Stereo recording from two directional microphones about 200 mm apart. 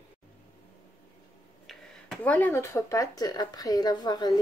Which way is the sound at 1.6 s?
5° left (ahead or behind).